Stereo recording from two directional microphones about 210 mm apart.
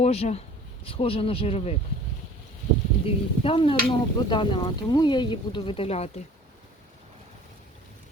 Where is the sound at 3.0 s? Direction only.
25° left (ahead or behind).